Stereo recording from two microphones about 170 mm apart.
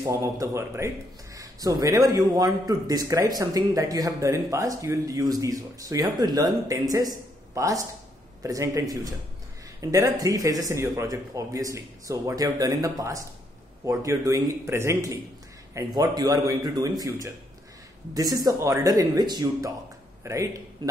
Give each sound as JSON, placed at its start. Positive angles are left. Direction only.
{"t": 0.0, "sound": "a man's voice", "side_deg": -20}